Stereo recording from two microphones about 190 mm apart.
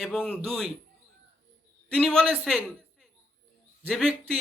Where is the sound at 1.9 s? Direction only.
5° left (ahead or behind).